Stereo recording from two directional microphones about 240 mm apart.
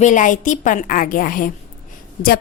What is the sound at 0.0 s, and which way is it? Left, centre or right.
A woman's voice, left.